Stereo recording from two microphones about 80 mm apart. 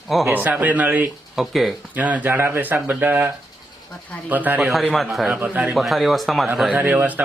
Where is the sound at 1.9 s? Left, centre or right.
Centre.